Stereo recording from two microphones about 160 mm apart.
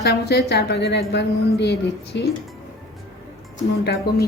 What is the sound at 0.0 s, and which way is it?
A woman's voice, 90° left.